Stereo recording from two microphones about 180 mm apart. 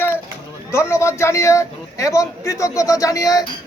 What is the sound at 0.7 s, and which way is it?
A man's voice, 15° left (ahead or behind).